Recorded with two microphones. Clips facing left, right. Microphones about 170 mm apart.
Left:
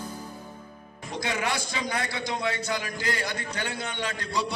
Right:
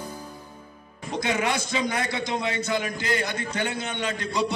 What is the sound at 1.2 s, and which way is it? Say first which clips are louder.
A man's voice: right 3 dB; 20° right (ahead or behind).